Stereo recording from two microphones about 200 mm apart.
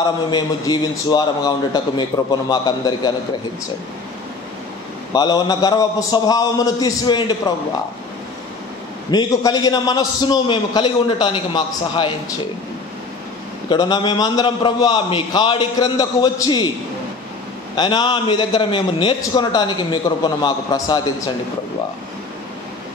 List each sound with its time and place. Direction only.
0.0 s a man's voice: 20° left (ahead or behind)
5.1 s a man's voice: 20° left (ahead or behind)
9.1 s a man's voice: 20° left (ahead or behind)
13.7 s a man's voice: 20° left (ahead or behind)
17.7 s a man's voice: 20° left (ahead or behind)